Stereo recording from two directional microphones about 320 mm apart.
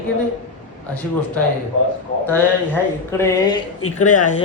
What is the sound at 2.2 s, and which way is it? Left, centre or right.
Speech, centre.